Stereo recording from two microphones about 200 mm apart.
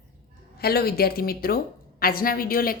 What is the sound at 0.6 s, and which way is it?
A woman's voice, 50° left (ahead or behind).